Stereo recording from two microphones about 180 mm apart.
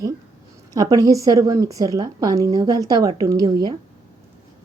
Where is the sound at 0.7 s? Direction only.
20° right (ahead or behind).